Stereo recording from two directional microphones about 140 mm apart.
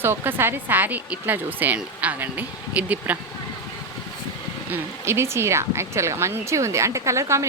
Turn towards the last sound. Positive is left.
turn(degrees=-20)  # may be behind; listen again after turning